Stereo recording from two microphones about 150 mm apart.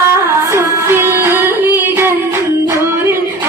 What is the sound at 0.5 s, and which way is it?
Singing, 15° right (ahead or behind).